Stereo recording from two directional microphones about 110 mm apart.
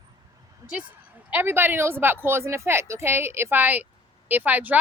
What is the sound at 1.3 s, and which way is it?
A woman's voice, 20° right (ahead or behind).